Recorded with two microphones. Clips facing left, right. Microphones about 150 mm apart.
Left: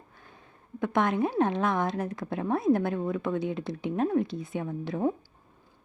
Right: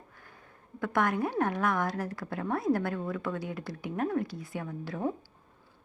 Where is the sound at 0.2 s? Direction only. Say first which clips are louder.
Left 1 dB; 20° left (ahead or behind).